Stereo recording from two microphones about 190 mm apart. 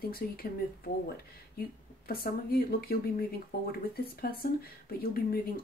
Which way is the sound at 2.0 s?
50° left (ahead or behind).